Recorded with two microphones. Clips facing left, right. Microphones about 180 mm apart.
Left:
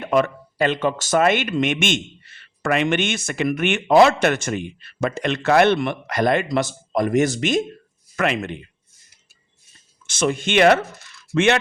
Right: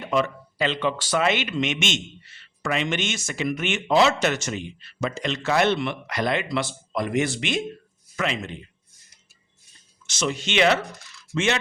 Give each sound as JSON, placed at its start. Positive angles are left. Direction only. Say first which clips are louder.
{"t": 0.0, "sound": "speech", "louder": "left 5 dB", "side_deg": 55}
{"t": 8.1, "sound": "speech", "louder": "left 5 dB", "side_deg": 60}
{"t": 10.1, "sound": "speech", "louder": "left 6 dB", "side_deg": 50}